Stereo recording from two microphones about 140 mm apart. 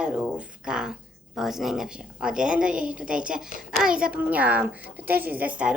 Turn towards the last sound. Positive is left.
turn(degrees=-10)  # may be behind; listen again after turning